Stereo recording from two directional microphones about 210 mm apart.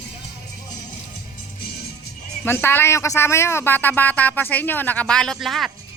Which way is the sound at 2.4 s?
10° left (ahead or behind).